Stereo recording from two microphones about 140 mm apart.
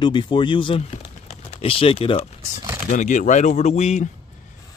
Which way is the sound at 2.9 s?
65° left (ahead or behind).